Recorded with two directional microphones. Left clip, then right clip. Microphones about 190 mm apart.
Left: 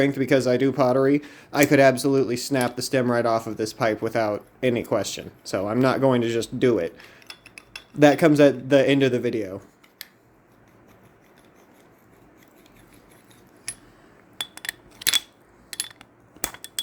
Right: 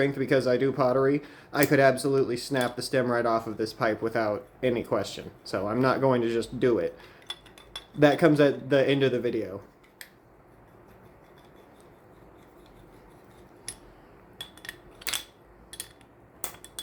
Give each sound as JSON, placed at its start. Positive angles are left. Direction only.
{"t": 0.0, "sound": "speech", "side_deg": 35}